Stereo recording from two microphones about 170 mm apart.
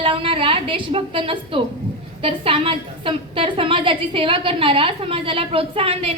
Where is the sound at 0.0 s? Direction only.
30° right (ahead or behind).